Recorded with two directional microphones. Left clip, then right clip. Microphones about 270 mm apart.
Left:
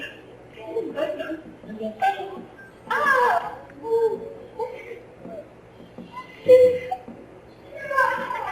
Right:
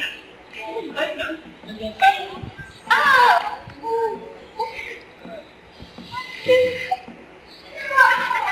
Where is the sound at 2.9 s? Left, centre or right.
Centre.